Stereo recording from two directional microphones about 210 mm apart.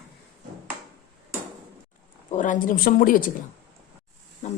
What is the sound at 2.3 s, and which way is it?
Speech, 35° left (ahead or behind).